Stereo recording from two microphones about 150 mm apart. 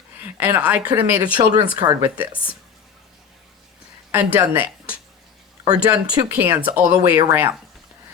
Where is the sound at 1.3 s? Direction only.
30° right (ahead or behind).